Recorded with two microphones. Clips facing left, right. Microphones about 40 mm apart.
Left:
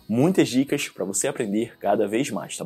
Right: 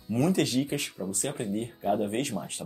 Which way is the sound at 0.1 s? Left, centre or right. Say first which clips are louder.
Left 6 dB; left.